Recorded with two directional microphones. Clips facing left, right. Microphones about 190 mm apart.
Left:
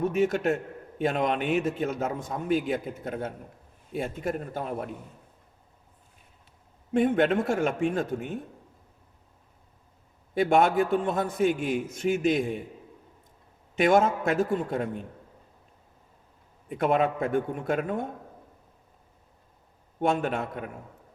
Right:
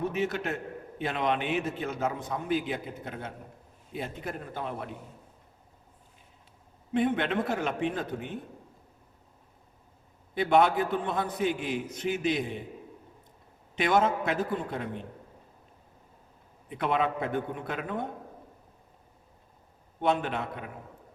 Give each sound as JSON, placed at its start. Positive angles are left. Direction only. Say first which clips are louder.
{"t": 0.2, "sound": "a man's voice", "louder": "left 6 dB", "side_deg": 45}
{"t": 6.9, "sound": "a man's voice", "louder": "left 4 dB", "side_deg": 45}
{"t": 10.3, "sound": "a man's voice", "louder": "left 2 dB", "side_deg": 45}
{"t": 13.7, "sound": "a man's voice", "louder": "left 4 dB", "side_deg": 45}
{"t": 16.6, "sound": "a man's voice", "louder": "left 4 dB", "side_deg": 45}
{"t": 20.0, "sound": "a man's voice", "louder": "left 2 dB", "side_deg": 45}